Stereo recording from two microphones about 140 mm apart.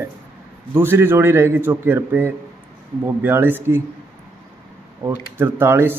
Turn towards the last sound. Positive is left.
turn(degrees=-15)  # may be behind; listen again after turning